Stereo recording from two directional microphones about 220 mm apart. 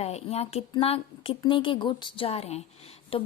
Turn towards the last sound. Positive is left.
turn(degrees=25)  # may be behind; listen again after turning